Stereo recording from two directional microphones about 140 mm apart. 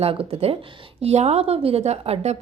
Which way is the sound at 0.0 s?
45° right (ahead or behind).